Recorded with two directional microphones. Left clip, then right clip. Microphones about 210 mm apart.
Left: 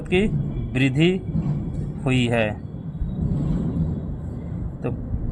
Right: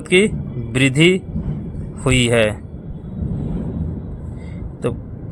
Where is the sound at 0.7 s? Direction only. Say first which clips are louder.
Right 7 dB; 35° right (ahead or behind).